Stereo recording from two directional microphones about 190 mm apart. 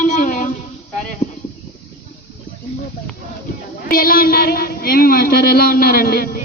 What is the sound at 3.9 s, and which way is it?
Speech, 50° left (ahead or behind).